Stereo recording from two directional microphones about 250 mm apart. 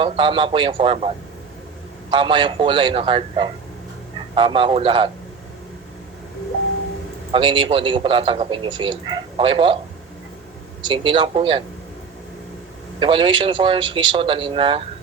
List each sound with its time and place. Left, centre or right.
0.0 s a man's voice: centre
7.3 s a man's voice: centre
10.8 s a man's voice: centre
13.0 s a man's voice: centre